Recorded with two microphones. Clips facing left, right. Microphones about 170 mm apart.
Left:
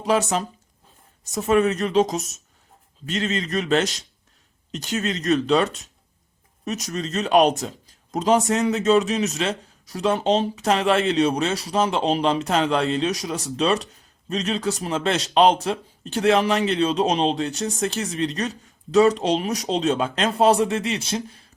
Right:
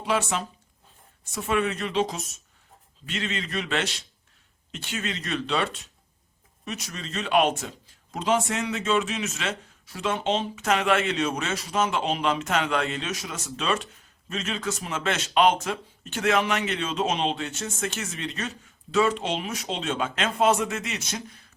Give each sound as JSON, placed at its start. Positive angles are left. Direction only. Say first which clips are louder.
{"t": 0.0, "sound": "a man's voice", "louder": "left 5 dB", "side_deg": 40}